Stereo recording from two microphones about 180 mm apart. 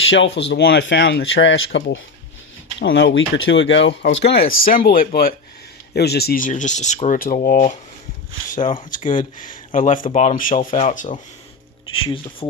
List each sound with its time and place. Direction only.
0.0 s speech: 90° left; by 7.8 s 45° left (ahead or behind)
9.0 s speech: 45° left (ahead or behind)
12.0 s speech: 30° left (ahead or behind)